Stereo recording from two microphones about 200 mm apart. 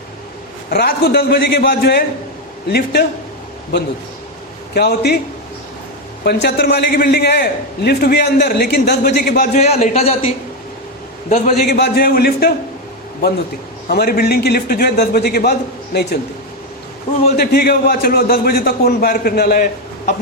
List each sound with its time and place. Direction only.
0.7 s a man's voice: 50° left (ahead or behind)
4.7 s a man's voice: 55° left (ahead or behind)
6.2 s a man's voice: 55° left (ahead or behind)
9.6 s speech: 35° left (ahead or behind)
11.6 s a man's voice: 50° left (ahead or behind)
13.8 s a man's voice: 50° left (ahead or behind)
17.3 s a man's voice: 50° left (ahead or behind)